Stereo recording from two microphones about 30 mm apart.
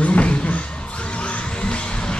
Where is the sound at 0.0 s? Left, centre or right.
Left.